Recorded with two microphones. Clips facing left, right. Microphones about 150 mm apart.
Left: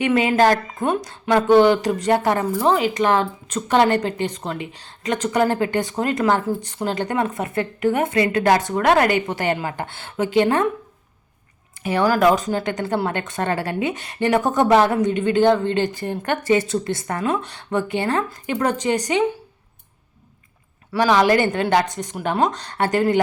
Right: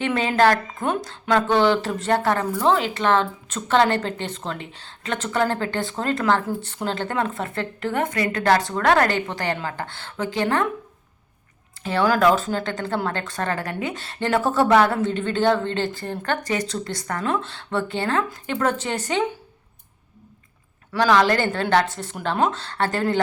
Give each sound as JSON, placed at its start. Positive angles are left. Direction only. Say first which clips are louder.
{"t": 0.0, "sound": "speech", "louder": "left 2 dB", "side_deg": 10}
{"t": 11.8, "sound": "speech", "louder": "left 2 dB", "side_deg": 15}
{"t": 13.1, "sound": "a woman's voice", "louder": "left 3 dB", "side_deg": 20}
{"t": 18.0, "sound": "speech", "louder": "left 1 dB", "side_deg": 5}
{"t": 20.9, "sound": "speech", "louder": "left 2 dB", "side_deg": 15}